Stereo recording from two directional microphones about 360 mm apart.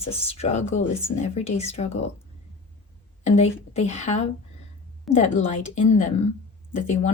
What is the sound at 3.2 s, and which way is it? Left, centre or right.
Speech, centre.